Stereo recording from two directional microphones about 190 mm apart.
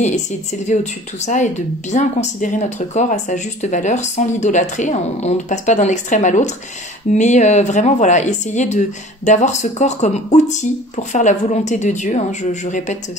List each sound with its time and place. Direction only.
0.0 s speech: 40° left (ahead or behind)